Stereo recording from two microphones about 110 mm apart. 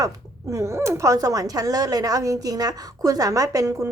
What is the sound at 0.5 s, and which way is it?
Speech, 25° right (ahead or behind).